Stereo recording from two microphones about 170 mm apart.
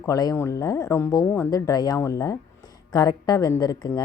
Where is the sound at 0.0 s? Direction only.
20° left (ahead or behind).